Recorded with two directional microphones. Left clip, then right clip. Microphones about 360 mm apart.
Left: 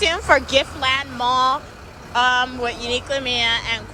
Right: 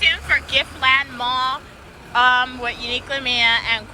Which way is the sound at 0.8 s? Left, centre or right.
Centre.